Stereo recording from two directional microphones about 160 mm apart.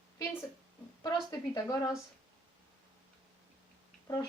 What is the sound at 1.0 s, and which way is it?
Speech, 25° left (ahead or behind).